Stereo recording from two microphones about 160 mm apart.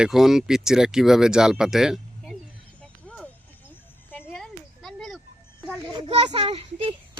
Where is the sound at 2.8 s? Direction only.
5° left (ahead or behind).